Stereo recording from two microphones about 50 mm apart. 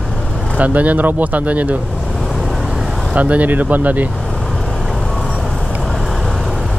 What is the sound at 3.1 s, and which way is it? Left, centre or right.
Speech, right.